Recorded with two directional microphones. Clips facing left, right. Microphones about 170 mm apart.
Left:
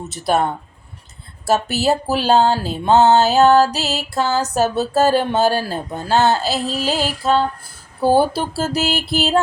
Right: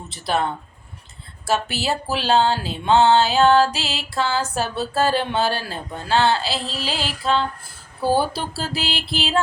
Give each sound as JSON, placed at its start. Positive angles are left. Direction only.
{"t": 0.1, "sound": "speech", "side_deg": 45}